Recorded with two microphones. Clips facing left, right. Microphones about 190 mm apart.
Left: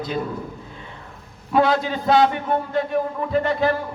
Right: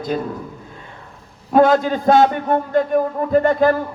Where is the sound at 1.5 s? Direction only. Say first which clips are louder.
Right 5 dB; 45° right (ahead or behind).